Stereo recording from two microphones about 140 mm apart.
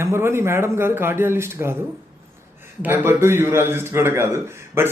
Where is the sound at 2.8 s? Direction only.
15° right (ahead or behind).